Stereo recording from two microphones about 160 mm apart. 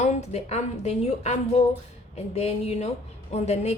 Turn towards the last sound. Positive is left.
turn(degrees=40)  # may be behind; listen again after turning